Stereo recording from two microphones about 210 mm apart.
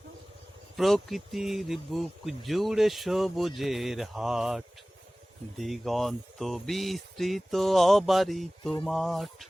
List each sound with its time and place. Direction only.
0.8 s speech: centre (ahead or behind)